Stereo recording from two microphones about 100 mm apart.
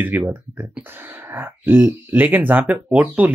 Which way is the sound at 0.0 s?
15° right (ahead or behind).